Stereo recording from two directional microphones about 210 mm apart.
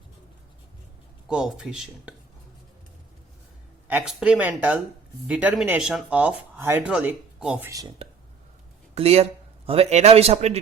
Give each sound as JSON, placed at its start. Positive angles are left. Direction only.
{"t": 1.3, "sound": "speech", "side_deg": -5}
{"t": 3.8, "sound": "speech", "side_deg": -5}
{"t": 9.0, "sound": "speech", "side_deg": -30}